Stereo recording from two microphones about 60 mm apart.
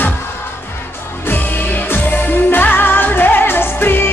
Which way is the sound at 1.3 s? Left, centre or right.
Left.